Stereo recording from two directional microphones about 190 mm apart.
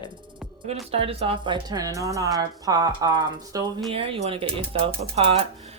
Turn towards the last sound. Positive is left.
turn(degrees=-30)  # may be behind; listen again after turning